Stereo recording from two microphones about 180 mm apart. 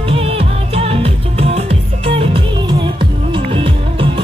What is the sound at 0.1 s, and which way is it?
Music, 30° right (ahead or behind).